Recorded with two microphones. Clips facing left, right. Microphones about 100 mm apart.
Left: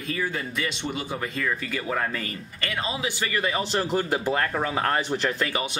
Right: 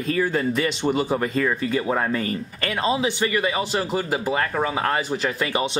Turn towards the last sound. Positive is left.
turn(degrees=-5)  # may be behind; listen again after turning